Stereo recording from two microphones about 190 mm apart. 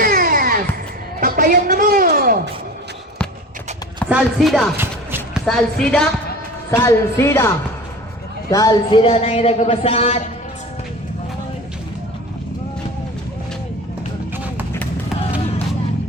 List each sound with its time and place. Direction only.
0.0 s music: 50° right (ahead or behind)
1.2 s a sound: 45° right (ahead or behind)
4.1 s chopping: centre (ahead or behind)
4.8 s music: 10° right (ahead or behind)
5.5 s chopping: 5° left (ahead or behind)
6.7 s speech: 15° left (ahead or behind); by 10.2 s 35° left (ahead or behind)